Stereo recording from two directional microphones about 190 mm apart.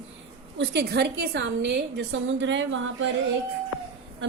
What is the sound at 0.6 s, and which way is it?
A woman's voice, 60° right (ahead or behind).